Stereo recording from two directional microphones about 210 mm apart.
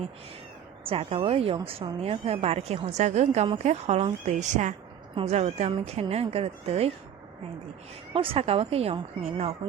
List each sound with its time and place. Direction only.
0.9 s speech: 25° right (ahead or behind)
8.1 s speech: 25° right (ahead or behind)